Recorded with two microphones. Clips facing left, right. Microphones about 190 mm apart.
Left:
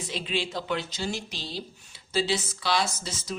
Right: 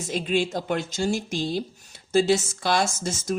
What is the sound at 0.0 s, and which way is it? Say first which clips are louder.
Speech: right 7 dB; 45° right (ahead or behind).